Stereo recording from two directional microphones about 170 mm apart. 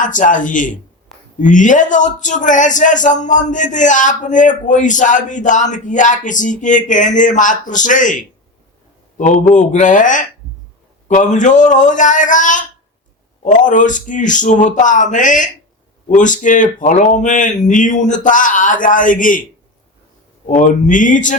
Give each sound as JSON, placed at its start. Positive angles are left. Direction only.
{"t": 0.0, "sound": "speech", "side_deg": 50}
{"t": 20.5, "sound": "speech", "side_deg": 50}